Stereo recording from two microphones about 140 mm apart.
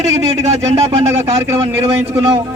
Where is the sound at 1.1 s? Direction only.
20° right (ahead or behind).